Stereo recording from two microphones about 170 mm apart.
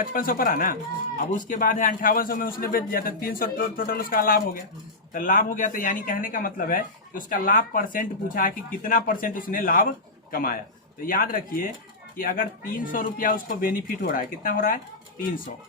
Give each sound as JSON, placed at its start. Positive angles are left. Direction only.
{"t": 0.0, "sound": "speech", "side_deg": 55}